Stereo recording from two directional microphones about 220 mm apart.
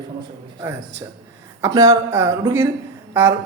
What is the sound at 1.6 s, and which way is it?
Speech, 15° right (ahead or behind).